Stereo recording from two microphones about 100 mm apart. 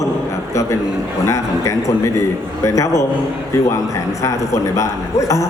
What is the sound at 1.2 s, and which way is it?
A man's voice, 30° left (ahead or behind).